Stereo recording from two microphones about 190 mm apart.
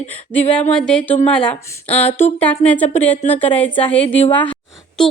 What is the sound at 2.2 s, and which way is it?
A woman's voice, 5° left (ahead or behind).